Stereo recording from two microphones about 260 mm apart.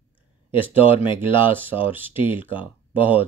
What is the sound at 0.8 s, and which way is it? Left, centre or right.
Speech, centre.